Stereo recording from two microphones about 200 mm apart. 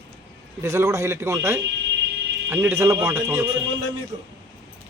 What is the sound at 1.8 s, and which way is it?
Fire alarm, 65° right (ahead or behind).